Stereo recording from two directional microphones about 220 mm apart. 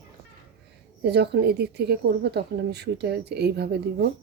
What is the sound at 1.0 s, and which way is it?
A woman's voice, 50° right (ahead or behind).